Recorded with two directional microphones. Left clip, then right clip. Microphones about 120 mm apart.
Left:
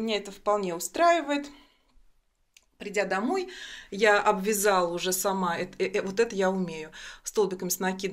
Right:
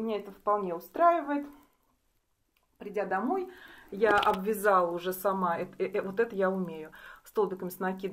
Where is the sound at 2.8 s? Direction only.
20° left (ahead or behind).